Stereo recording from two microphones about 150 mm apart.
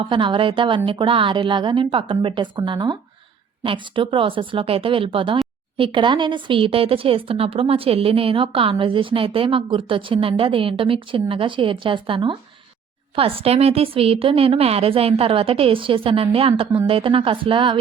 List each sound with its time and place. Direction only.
0.0 s a woman's voice: 35° right (ahead or behind)